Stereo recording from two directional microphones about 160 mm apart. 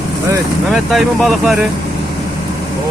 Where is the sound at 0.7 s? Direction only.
Centre (ahead or behind).